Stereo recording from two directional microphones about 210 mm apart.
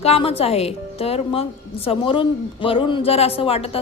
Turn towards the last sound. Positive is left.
turn(degrees=25)  # may be behind; listen again after turning